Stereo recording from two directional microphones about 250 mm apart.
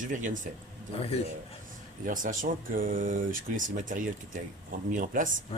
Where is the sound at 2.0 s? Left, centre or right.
Right.